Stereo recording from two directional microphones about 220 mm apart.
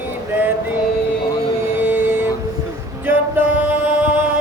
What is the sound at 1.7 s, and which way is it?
Music, 10° right (ahead or behind).